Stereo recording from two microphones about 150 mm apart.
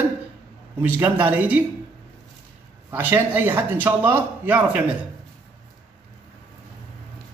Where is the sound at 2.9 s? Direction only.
15° right (ahead or behind).